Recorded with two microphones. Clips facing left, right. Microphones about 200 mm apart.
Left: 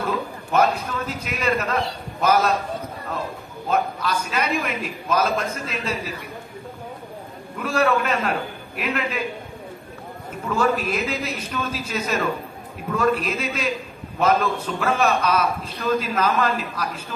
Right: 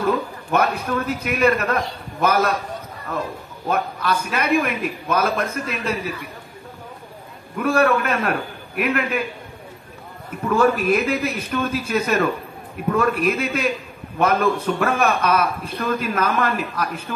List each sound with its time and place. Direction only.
0.0 s a man's voice: 60° right (ahead or behind)
3.6 s a man's voice: 55° right (ahead or behind)
7.5 s a man's voice: 55° right (ahead or behind)
10.5 s a man's voice: 55° right (ahead or behind)